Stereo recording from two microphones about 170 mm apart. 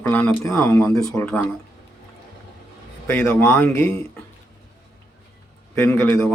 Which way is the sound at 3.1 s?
10° left (ahead or behind).